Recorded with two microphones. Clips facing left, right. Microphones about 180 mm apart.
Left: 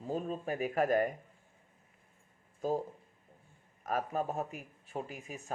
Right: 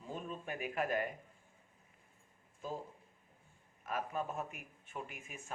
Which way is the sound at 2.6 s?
40° left (ahead or behind).